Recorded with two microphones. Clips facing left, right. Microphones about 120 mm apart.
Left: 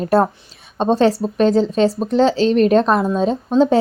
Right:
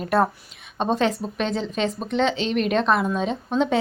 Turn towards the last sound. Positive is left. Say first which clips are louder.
# left 8 dB
turn(degrees=35)  # may be behind; listen again after turning